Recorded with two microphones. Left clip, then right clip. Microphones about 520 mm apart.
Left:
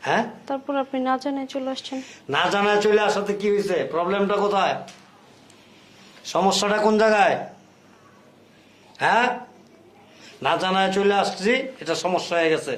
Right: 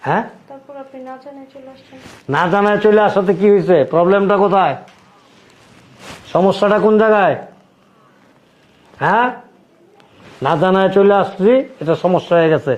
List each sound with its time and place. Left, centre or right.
0.1 s speech: right
0.4 s a woman's voice: left
2.3 s a man's voice: right
6.3 s a man's voice: right
9.0 s speech: right
10.4 s a man's voice: right